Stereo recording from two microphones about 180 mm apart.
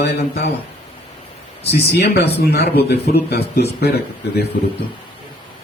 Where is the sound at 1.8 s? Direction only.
65° left (ahead or behind).